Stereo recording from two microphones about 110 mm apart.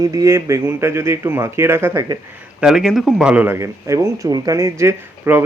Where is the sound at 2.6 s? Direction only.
5° right (ahead or behind).